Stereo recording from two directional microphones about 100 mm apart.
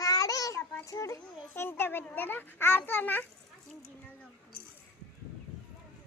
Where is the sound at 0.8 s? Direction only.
30° left (ahead or behind).